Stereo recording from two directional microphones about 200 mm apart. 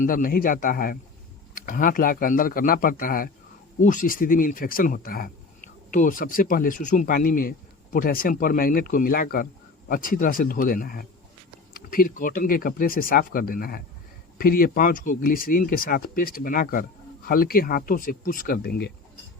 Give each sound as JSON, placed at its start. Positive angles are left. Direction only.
{"t": 0.0, "sound": "speech", "side_deg": 45}